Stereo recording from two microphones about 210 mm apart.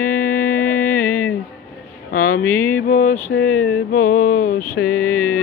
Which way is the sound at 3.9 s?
40° left (ahead or behind).